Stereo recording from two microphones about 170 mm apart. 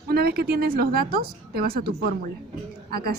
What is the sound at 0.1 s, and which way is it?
A woman's voice, 65° right (ahead or behind).